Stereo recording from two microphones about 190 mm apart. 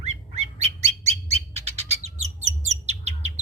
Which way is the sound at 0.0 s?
35° right (ahead or behind).